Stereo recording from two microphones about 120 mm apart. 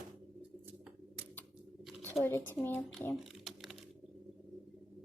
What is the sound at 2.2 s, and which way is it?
Speech, 20° left (ahead or behind).